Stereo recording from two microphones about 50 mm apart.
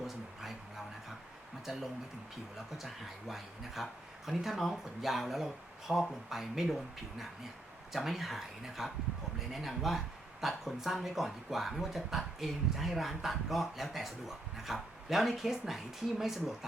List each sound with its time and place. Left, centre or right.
1.6 s speech: centre